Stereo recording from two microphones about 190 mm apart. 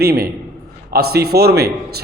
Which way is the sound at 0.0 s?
55° right (ahead or behind).